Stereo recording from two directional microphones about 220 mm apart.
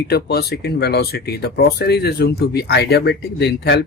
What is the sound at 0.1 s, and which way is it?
Speech, 45° left (ahead or behind).